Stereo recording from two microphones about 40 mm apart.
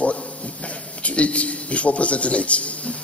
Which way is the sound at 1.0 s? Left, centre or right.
Left.